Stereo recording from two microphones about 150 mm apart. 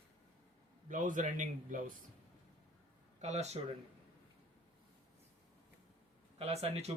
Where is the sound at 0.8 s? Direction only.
60° right (ahead or behind).